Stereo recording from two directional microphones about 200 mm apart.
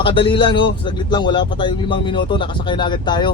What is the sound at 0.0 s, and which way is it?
Speech, 25° left (ahead or behind).